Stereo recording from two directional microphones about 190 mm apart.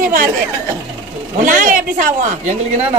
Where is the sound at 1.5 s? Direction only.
45° right (ahead or behind).